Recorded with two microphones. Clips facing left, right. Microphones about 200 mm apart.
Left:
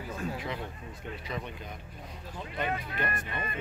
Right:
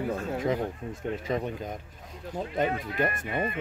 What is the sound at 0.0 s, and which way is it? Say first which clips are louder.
Speech: right 7 dB; 55° right (ahead or behind).